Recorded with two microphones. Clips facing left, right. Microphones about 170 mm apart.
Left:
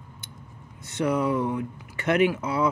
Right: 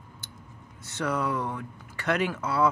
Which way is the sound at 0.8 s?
20° left (ahead or behind).